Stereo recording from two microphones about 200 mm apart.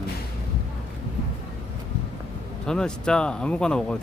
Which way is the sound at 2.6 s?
5° left (ahead or behind).